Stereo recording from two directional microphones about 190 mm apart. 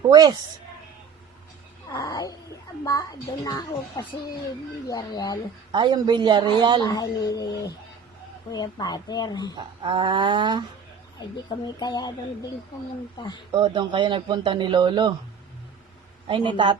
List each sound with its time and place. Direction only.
0.1 s speech: 20° right (ahead or behind)
1.9 s a sound: 20° left (ahead or behind)
2.8 s a child's voice: 20° left (ahead or behind)
5.7 s speech: 25° right (ahead or behind)
6.8 s a child's voice: 20° left (ahead or behind)
9.8 s speech: 25° right (ahead or behind)
11.4 s a child's voice: 20° left (ahead or behind)
13.5 s speech: 25° right (ahead or behind)
16.2 s speech: 25° right (ahead or behind)